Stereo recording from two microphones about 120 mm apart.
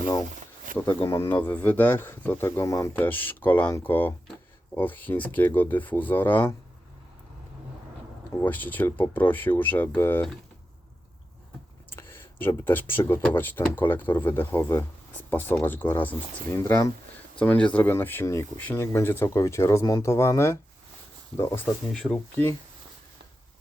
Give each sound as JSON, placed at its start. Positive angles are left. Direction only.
{"t": 0.7, "sound": "a sound", "side_deg": -90}
{"t": 1.0, "sound": "speech", "side_deg": 20}
{"t": 8.3, "sound": "speech", "side_deg": 20}
{"t": 11.9, "sound": "a sound", "side_deg": 20}
{"t": 13.2, "sound": "speech", "side_deg": 15}
{"t": 19.8, "sound": "speech", "side_deg": 35}
{"t": 20.1, "sound": "speech", "side_deg": 20}
{"t": 21.9, "sound": "speech", "side_deg": 5}